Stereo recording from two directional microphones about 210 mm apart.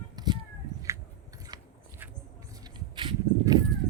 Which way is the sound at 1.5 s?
20° right (ahead or behind).